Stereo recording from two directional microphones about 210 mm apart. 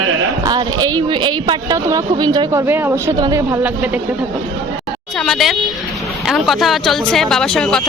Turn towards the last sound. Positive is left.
turn(degrees=5)  # may be behind; listen again after turning